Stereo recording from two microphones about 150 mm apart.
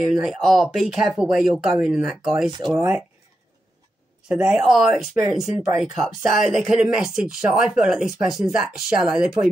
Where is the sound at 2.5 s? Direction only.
30° right (ahead or behind).